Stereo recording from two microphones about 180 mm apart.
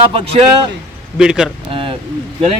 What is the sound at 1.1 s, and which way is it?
Speech, 5° right (ahead or behind).